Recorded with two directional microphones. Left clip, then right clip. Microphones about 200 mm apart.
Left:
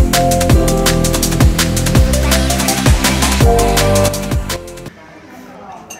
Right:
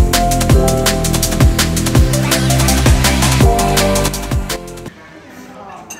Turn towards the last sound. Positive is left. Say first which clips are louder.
# left 1 dB
turn(degrees=0)  # may be behind; listen again after turning